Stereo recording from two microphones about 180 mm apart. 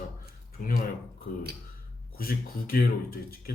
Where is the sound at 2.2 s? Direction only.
55° left (ahead or behind).